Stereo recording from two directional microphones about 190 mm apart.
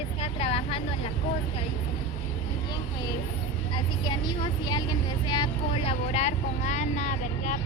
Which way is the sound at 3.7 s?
25° left (ahead or behind).